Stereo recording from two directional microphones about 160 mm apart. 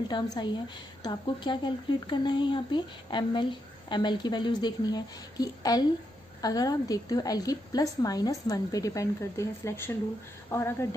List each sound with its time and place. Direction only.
0.1 s a woman's voice: 25° left (ahead or behind)